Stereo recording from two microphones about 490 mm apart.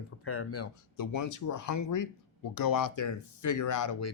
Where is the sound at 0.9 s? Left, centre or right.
Left.